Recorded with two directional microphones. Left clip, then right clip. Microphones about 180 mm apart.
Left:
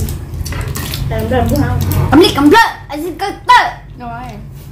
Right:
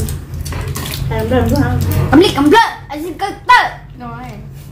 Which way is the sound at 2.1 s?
25° left (ahead or behind).